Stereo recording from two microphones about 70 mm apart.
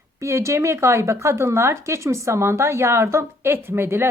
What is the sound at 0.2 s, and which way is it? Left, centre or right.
Speech, right.